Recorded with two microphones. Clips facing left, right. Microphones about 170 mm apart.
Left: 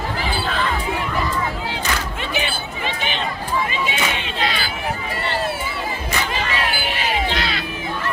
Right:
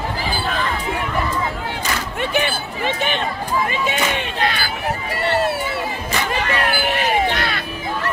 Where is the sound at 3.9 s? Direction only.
50° right (ahead or behind).